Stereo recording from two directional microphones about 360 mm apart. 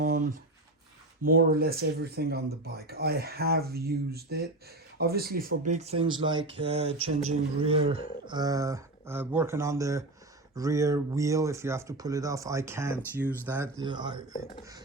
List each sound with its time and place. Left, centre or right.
1.2 s speech: right
7.0 s mantra: right
7.6 s speech: centre
14.3 s speech: left